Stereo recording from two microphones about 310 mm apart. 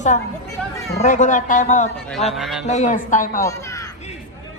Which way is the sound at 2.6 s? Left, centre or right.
Left.